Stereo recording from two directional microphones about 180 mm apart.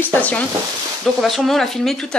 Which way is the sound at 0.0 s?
10° left (ahead or behind).